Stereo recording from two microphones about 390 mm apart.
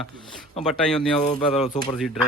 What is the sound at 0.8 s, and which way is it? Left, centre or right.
Speech, centre.